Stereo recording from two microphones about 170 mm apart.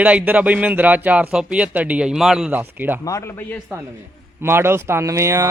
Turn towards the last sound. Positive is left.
turn(degrees=-15)  # may be behind; listen again after turning